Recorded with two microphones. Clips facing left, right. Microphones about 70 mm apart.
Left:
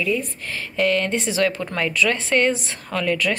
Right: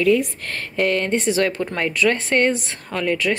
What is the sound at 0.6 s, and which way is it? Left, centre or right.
Speech, right.